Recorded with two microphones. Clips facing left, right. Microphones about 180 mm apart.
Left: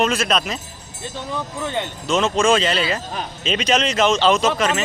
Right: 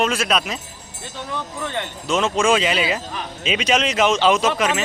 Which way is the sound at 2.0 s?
10° right (ahead or behind).